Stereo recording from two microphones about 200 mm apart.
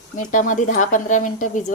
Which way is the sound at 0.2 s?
40° left (ahead or behind).